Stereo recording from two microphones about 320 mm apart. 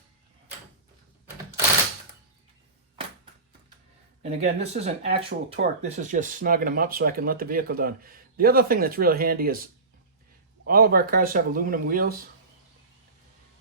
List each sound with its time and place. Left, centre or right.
4.2 s speech: centre